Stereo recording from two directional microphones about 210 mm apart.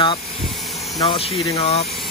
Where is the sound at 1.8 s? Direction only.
Centre (ahead or behind).